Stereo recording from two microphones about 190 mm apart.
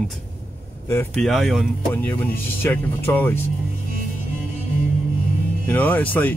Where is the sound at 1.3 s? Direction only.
Centre (ahead or behind).